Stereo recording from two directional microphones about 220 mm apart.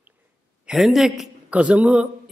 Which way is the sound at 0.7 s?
Centre (ahead or behind).